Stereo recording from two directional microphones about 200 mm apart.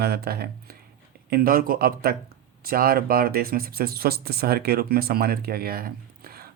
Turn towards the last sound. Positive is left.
turn(degrees=-50)  # may be behind; listen again after turning